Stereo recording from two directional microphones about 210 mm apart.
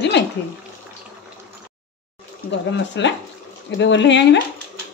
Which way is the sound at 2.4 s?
60° left (ahead or behind).